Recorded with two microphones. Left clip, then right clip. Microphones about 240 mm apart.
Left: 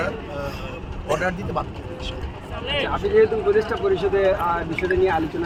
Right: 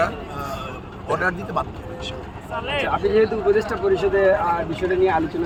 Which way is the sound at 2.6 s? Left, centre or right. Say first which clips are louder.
Even; centre.